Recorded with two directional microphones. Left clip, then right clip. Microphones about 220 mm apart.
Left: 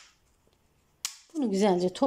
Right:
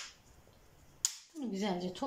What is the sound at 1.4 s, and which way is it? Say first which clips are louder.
Speech: left 13 dB; 50° left (ahead or behind).